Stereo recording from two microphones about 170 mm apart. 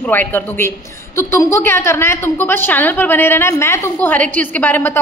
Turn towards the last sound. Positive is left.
turn(degrees=10)  # may be behind; listen again after turning